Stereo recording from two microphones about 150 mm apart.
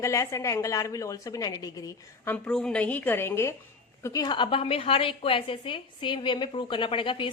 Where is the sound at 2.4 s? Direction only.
5° left (ahead or behind).